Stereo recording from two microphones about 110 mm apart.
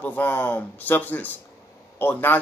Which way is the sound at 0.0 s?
15° left (ahead or behind).